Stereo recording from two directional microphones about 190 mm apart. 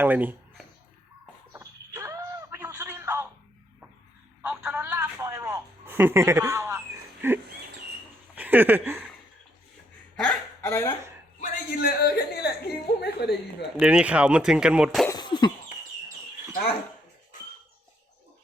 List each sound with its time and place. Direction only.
0.0 s speech: 10° right (ahead or behind)
1.5 s a sound: 15° right (ahead or behind)
4.4 s telephone: 5° right (ahead or behind)
8.4 s speech: 10° right (ahead or behind)
10.2 s hiccup: 5° left (ahead or behind)
11.3 s speech: 50° left (ahead or behind)
13.7 s speech: 5° right (ahead or behind)
15.1 s cough: 25° left (ahead or behind)